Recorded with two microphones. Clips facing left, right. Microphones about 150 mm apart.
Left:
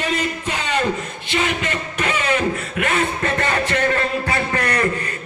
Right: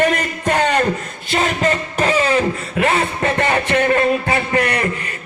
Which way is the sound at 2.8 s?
30° right (ahead or behind).